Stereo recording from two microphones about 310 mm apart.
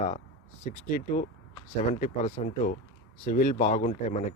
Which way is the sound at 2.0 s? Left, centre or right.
Left.